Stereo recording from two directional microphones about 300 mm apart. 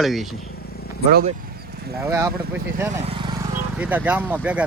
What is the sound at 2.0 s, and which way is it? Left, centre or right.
Speech, centre.